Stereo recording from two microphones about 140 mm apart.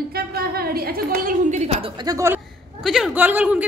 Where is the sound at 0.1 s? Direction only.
90° right; by 1.7 s 60° right (ahead or behind).